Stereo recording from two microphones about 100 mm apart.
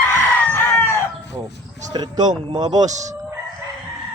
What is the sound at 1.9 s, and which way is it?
Speech, 45° right (ahead or behind).